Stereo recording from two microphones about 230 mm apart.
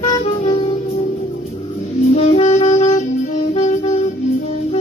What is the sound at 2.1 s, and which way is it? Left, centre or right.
Music, left.